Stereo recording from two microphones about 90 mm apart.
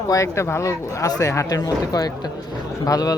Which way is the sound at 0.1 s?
35° left (ahead or behind).